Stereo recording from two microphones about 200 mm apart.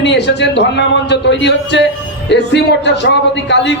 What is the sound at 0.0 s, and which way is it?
A man's voice, 60° left (ahead or behind).